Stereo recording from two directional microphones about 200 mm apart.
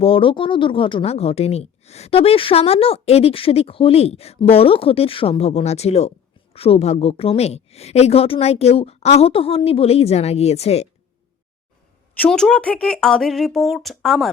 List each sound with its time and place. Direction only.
0.0 s speech: 25° left (ahead or behind)
12.1 s speech: 5° left (ahead or behind)